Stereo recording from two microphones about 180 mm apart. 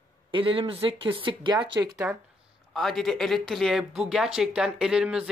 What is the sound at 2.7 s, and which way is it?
Speech, centre (ahead or behind).